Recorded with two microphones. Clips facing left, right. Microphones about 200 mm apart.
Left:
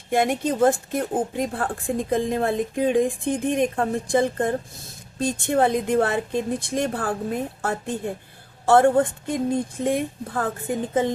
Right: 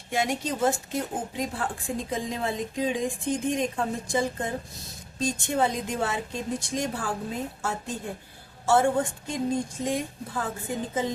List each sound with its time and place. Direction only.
0.1 s a woman's voice: 55° left (ahead or behind)